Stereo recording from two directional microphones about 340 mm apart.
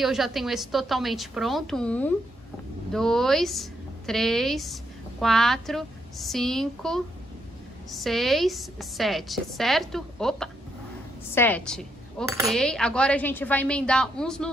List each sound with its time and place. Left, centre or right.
0.0 s dishes: centre